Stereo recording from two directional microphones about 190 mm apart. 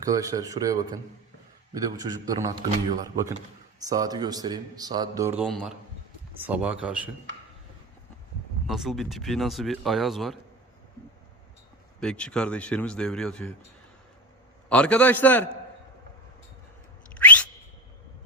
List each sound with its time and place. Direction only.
0.0 s a man's voice: 20° right (ahead or behind)
5.5 s speech: centre (ahead or behind)
8.6 s speech: centre (ahead or behind)
11.9 s speech: 5° left (ahead or behind)
14.7 s a man's voice: 5° left (ahead or behind)
17.2 s a sound: 10° left (ahead or behind)